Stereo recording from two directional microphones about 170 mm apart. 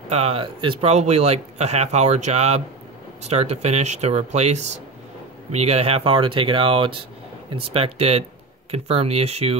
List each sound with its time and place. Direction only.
0.1 s speech: 35° right (ahead or behind)